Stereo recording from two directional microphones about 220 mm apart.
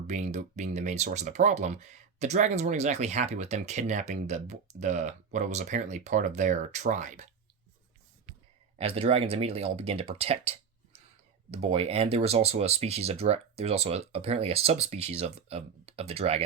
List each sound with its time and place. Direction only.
0.1 s speech: 30° right (ahead or behind)
8.8 s speech: 25° right (ahead or behind)